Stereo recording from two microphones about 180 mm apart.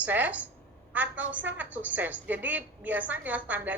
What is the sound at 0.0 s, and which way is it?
A woman's voice, 10° right (ahead or behind).